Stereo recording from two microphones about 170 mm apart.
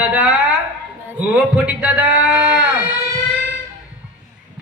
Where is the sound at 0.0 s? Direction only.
5° right (ahead or behind).